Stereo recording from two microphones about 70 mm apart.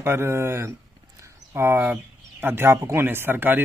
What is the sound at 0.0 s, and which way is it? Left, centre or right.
Speech, right.